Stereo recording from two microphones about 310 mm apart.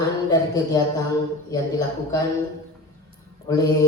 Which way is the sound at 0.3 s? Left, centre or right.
Centre.